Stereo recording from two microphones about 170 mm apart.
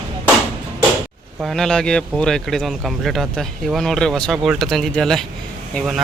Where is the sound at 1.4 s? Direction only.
Centre (ahead or behind).